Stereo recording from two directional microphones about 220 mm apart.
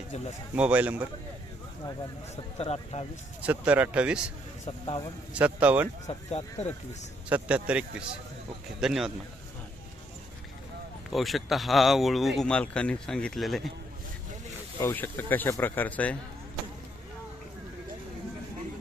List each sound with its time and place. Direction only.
0.5 s speech: 5° right (ahead or behind)
2.3 s speech: 30° left (ahead or behind)
3.4 s speech: 5° right (ahead or behind)
4.6 s speech: 25° left (ahead or behind)
5.3 s speech: 5° right (ahead or behind)
6.1 s speech: 30° left (ahead or behind)
7.3 s speech: 5° right (ahead or behind)
11.1 s speech: centre (ahead or behind)
14.8 s speech: 10° left (ahead or behind)